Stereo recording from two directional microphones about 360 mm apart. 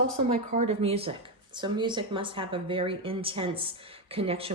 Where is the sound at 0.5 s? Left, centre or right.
Centre.